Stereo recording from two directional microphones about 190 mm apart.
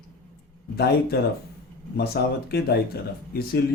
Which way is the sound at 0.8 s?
55° left (ahead or behind).